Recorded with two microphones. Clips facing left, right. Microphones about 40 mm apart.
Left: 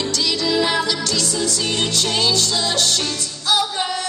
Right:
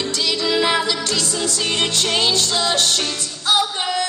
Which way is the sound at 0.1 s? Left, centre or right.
Centre.